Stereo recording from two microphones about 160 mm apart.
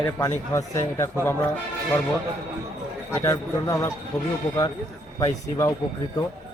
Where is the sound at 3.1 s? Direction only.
15° left (ahead or behind).